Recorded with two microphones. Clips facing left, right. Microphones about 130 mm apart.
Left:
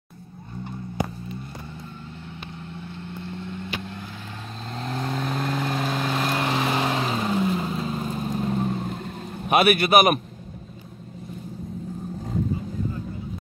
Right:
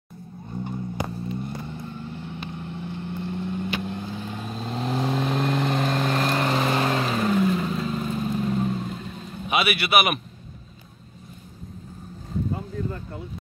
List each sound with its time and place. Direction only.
3.3 s vehicle: 20° right (ahead or behind)
4.6 s vehicle: 5° right (ahead or behind); by 8.2 s 30° left (ahead or behind)
8.3 s vehicle: 40° left (ahead or behind)
12.5 s vehicle: 75° right (ahead or behind)